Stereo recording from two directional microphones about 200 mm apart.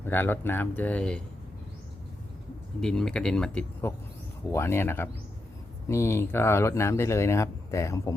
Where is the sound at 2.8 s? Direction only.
5° left (ahead or behind).